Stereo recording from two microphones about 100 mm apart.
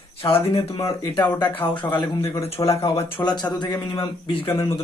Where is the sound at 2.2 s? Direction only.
75° left (ahead or behind).